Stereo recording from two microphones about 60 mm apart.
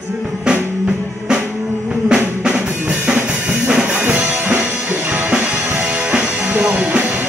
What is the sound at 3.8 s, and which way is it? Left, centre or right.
Music, right.